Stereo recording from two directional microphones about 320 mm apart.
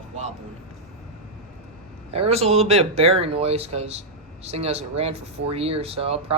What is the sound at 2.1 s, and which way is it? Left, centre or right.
Speech, centre.